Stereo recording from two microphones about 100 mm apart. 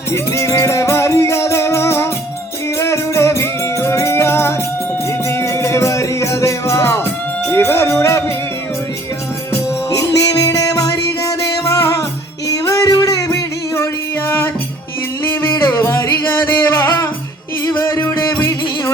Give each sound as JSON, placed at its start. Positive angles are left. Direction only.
{"t": 0.1, "sound": "music", "side_deg": 30}
{"t": 7.4, "sound": "a sound", "side_deg": 25}
{"t": 9.5, "sound": "music", "side_deg": 30}
{"t": 14.3, "sound": "music", "side_deg": 25}